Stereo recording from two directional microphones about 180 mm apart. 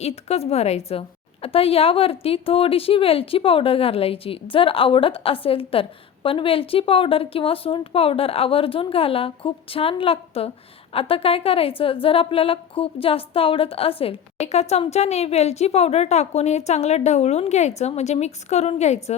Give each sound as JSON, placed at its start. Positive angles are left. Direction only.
{"t": 0.0, "sound": "a woman's voice", "side_deg": 35}